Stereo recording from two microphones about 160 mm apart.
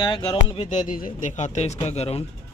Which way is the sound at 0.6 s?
50° left (ahead or behind).